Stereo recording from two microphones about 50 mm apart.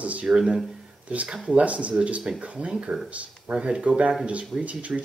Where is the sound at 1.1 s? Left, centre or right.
Right.